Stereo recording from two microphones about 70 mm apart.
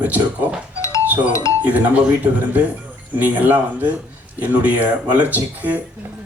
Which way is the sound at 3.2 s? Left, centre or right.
Right.